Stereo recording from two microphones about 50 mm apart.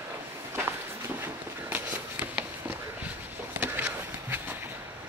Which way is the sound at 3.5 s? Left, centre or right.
Right.